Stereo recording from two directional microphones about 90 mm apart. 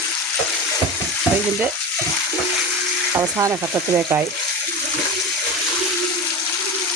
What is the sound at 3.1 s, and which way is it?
Speech, 25° right (ahead or behind).